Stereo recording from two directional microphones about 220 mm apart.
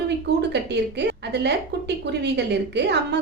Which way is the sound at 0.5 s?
50° right (ahead or behind).